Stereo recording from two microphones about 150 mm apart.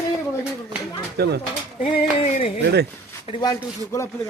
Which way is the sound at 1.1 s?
90° right.